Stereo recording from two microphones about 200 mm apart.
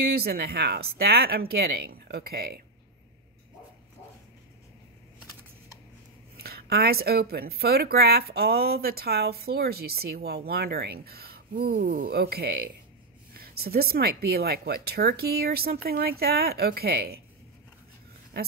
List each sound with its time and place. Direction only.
0.1 s a woman's voice: 50° right (ahead or behind)
6.3 s a woman's voice: 50° right (ahead or behind)